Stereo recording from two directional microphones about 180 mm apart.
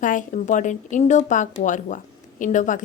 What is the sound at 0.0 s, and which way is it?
A woman's voice, 45° left (ahead or behind).